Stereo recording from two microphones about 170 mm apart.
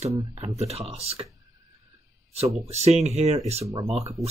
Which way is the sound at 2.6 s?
40° right (ahead or behind).